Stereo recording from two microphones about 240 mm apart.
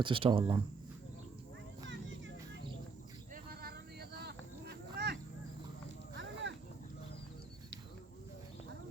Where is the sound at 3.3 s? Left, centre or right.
Right.